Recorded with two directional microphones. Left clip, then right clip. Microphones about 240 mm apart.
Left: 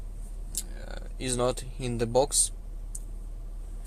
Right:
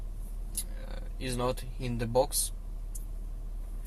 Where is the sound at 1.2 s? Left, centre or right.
Left.